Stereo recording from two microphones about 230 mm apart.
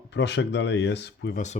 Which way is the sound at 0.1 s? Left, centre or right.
Left.